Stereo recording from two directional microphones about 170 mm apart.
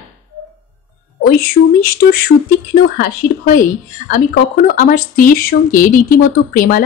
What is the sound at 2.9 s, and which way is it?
A woman's voice, 55° left (ahead or behind).